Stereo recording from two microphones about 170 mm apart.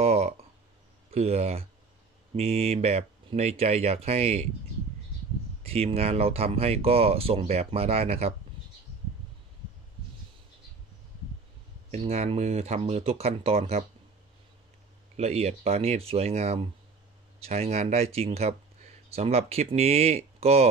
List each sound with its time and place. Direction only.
0.0 s a sound: 35° right (ahead or behind)
1.1 s speech: 35° right (ahead or behind)
5.6 s speech: 35° right (ahead or behind)
12.0 s speech: 35° right (ahead or behind)
15.1 s speech: 40° right (ahead or behind)